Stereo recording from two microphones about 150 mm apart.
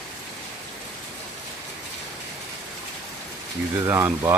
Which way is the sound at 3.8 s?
15° right (ahead or behind).